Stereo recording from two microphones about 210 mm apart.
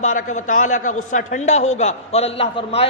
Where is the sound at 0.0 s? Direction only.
35° left (ahead or behind).